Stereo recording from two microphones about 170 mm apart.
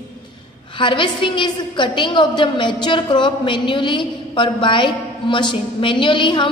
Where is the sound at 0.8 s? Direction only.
30° left (ahead or behind).